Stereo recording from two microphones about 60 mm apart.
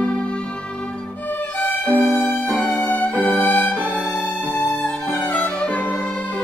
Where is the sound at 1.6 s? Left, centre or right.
Left.